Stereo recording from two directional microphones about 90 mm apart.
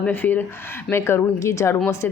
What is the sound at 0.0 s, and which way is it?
A woman's voice, 20° left (ahead or behind).